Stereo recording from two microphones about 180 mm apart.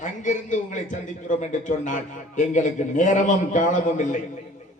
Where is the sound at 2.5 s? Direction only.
45° left (ahead or behind).